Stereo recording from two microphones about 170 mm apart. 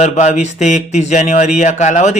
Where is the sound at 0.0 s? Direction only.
45° left (ahead or behind).